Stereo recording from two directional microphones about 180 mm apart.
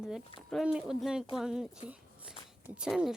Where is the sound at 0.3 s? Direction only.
Centre (ahead or behind).